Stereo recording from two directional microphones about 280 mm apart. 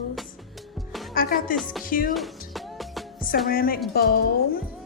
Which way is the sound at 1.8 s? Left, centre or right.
Left.